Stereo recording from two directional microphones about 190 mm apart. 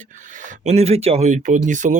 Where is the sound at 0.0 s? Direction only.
40° right (ahead or behind).